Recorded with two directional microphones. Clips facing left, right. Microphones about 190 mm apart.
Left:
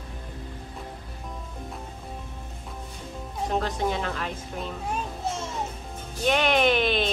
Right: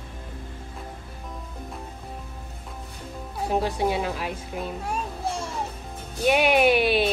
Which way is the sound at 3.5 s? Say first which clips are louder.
Right 3 dB; 10° right (ahead or behind).